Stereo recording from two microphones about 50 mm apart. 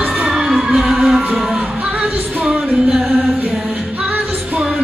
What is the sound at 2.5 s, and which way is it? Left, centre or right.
Music, centre.